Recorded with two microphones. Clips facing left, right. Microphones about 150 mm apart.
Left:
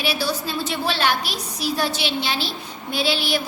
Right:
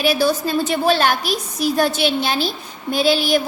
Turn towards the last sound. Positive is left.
turn(degrees=-45)  # may be behind; listen again after turning